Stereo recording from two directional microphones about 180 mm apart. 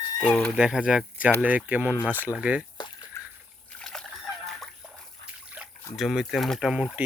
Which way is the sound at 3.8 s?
5° left (ahead or behind).